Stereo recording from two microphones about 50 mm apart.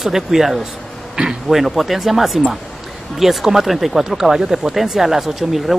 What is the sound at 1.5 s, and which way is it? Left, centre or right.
A man's voice, centre.